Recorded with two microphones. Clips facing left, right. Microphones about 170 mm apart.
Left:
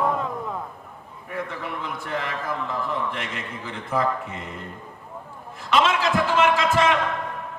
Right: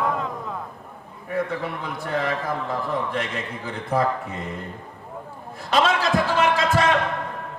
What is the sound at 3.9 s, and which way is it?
Speech, 35° right (ahead or behind).